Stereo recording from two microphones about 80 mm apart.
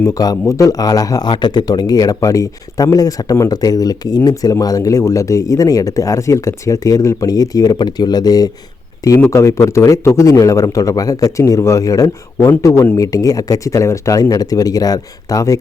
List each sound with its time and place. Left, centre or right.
0.0 s speech: left
1.3 s speech: left
9.3 s a man's voice: left
13.0 s speech: left